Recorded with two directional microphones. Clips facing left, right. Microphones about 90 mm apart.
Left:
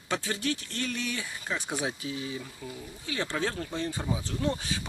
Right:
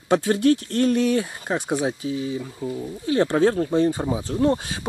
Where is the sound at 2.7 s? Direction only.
40° right (ahead or behind).